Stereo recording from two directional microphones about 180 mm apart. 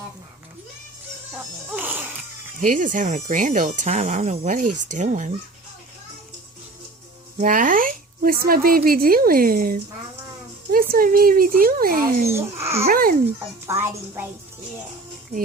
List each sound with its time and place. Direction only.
1.7 s music: 10° right (ahead or behind)
2.6 s speech: 45° right (ahead or behind)
7.3 s speech: 45° right (ahead or behind)
12.3 s a woman's voice: 15° right (ahead or behind)
12.9 s speech: 50° right (ahead or behind)
13.7 s a woman's voice: 15° right (ahead or behind)